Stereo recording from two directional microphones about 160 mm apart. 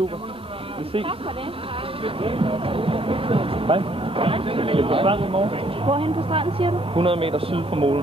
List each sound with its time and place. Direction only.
2.0 s speech: 35° right (ahead or behind)